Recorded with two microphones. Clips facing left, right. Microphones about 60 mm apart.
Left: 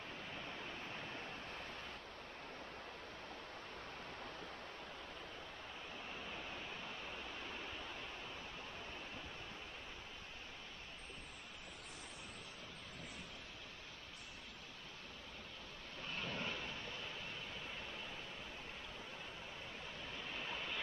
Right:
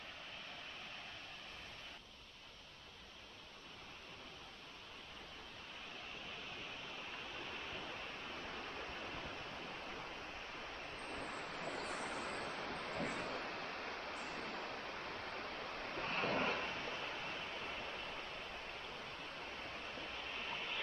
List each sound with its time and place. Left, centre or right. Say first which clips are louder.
11.1 s vehicle: right 10 dB; right
15.9 s waves: right 7 dB; right
20.3 s vehicle: even; centre